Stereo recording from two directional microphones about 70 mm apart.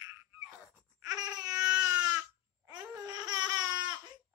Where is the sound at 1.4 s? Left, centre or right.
Centre.